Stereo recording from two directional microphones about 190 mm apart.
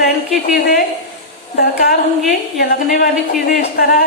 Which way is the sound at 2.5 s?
50° left (ahead or behind).